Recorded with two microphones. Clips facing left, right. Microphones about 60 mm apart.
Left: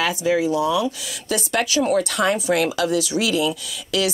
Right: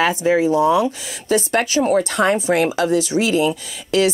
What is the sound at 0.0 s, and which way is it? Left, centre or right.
Speech, right.